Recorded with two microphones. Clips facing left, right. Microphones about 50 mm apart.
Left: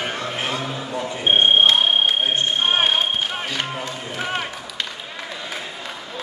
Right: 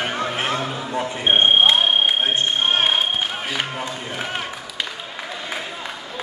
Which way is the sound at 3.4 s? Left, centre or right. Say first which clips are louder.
Right 1 dB; centre.